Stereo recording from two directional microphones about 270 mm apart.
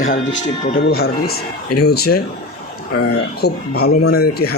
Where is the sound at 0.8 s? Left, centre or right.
Left.